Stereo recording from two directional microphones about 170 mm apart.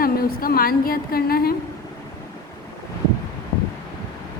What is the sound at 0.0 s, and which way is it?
A woman's voice, 60° left (ahead or behind).